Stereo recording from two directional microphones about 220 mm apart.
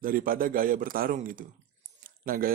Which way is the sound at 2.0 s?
40° right (ahead or behind).